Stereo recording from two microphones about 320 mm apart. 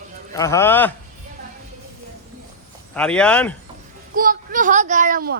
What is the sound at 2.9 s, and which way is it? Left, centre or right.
Speech, centre.